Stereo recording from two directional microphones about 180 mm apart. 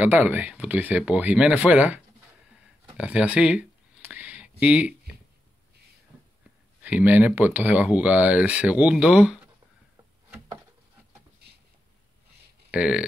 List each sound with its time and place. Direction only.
0.0 s speech: 10° right (ahead or behind)
3.0 s a sound: 5° right (ahead or behind)
6.8 s speech: 10° right (ahead or behind)
12.7 s speech: 5° right (ahead or behind)